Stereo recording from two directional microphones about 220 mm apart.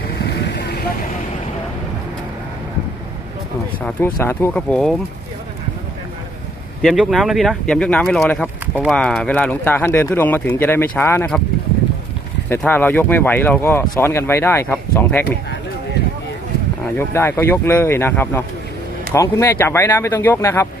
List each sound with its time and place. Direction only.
0.3 s vehicle: 50° left (ahead or behind)
3.8 s speech: 10° left (ahead or behind)
6.8 s speech: centre (ahead or behind)
12.5 s speech: 10° left (ahead or behind)
17.0 s speech: 10° left (ahead or behind)